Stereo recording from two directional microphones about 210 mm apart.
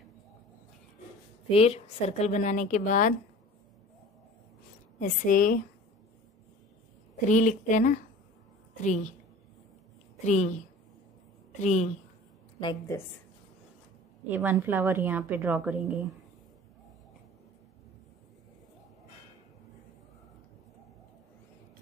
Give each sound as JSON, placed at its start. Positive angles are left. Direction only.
{"t": 1.5, "sound": "a woman's voice", "side_deg": 30}
{"t": 5.0, "sound": "a woman's voice", "side_deg": 40}
{"t": 7.2, "sound": "a woman's voice", "side_deg": 35}
{"t": 10.2, "sound": "a woman's voice", "side_deg": 35}
{"t": 11.6, "sound": "a woman's voice", "side_deg": 35}
{"t": 12.5, "sound": "a woman's voice", "side_deg": 20}
{"t": 14.3, "sound": "a woman's voice", "side_deg": -10}